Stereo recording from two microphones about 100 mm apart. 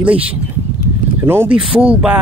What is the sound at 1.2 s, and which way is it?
Speech, 25° right (ahead or behind).